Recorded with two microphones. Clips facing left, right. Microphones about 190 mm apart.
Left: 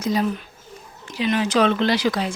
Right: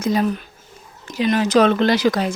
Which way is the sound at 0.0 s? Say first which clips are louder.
Right 3 dB; 50° right (ahead or behind).